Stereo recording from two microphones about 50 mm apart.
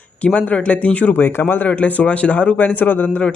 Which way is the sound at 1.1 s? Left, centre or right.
Left.